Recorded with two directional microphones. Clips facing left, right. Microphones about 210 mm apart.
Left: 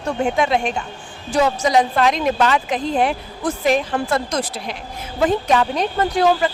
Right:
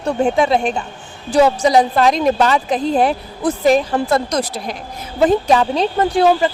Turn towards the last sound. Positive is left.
turn(degrees=-30)  # may be behind; listen again after turning